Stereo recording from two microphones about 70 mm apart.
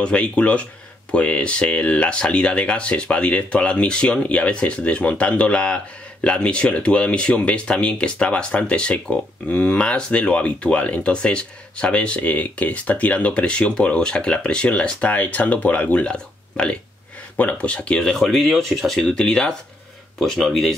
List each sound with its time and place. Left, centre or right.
0.0 s speech: centre